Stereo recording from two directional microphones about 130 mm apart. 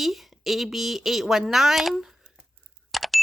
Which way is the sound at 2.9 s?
Centre (ahead or behind).